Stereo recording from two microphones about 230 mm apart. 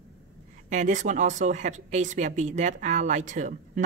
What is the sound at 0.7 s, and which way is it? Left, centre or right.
A woman's voice, right.